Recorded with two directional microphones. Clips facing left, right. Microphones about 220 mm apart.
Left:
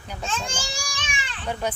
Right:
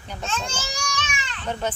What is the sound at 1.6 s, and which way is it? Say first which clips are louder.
Speech: even; 10° left (ahead or behind).